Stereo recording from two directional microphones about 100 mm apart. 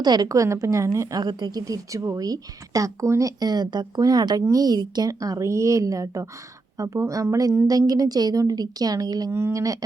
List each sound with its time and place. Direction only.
0.0 s a woman's voice: 45° right (ahead or behind)
9.3 s a woman's voice: 30° right (ahead or behind)